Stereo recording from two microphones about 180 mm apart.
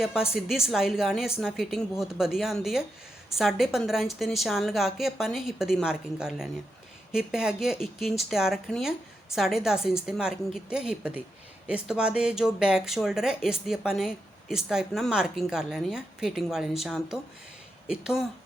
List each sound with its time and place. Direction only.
0.0 s speech: 5° right (ahead or behind)